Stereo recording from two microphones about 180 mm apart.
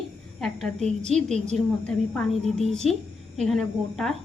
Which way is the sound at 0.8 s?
40° right (ahead or behind).